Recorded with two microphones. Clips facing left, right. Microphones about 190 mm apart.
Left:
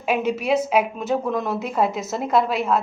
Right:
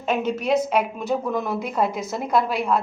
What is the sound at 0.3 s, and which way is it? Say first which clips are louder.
Speech: left 1 dB; 10° left (ahead or behind).